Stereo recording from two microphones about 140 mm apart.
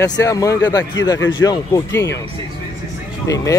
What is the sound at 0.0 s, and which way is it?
A man's voice, 25° left (ahead or behind).